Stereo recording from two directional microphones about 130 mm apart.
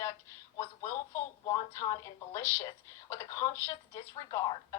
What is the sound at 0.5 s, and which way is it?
Speech, 20° left (ahead or behind).